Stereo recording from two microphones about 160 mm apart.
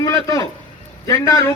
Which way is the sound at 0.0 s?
20° left (ahead or behind).